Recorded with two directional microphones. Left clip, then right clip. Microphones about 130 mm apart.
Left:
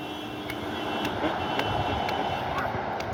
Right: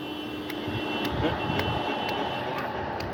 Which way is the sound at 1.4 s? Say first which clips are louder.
Left 1 dB; 20° left (ahead or behind).